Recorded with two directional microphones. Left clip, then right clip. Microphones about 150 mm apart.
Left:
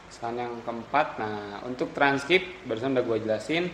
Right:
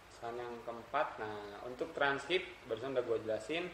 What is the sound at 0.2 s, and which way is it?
Speech, 35° left (ahead or behind).